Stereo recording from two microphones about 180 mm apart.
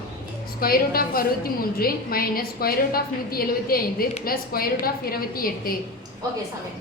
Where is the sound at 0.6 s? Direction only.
55° left (ahead or behind).